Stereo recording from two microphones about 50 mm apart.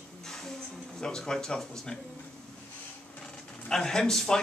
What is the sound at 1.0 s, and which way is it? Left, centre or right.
Speech, centre.